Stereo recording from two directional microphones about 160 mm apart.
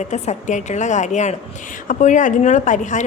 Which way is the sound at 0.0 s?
45° left (ahead or behind).